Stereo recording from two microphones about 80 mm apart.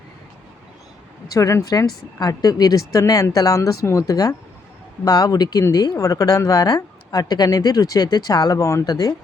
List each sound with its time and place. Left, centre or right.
1.3 s a woman's voice: left